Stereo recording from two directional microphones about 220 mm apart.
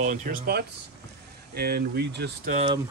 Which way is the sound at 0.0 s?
35° right (ahead or behind).